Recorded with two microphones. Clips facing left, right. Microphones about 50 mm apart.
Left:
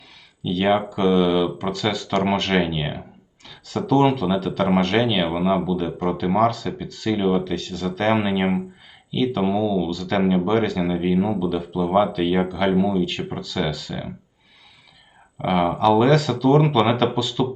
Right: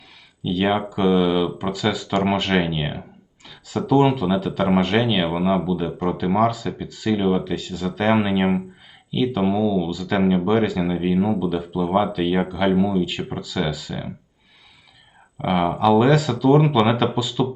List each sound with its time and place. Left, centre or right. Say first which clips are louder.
0.4 s speech: left 1 dB; centre
15.4 s speech: even; centre